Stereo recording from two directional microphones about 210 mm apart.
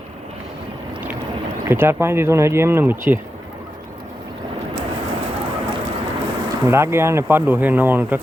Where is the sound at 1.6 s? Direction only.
10° right (ahead or behind).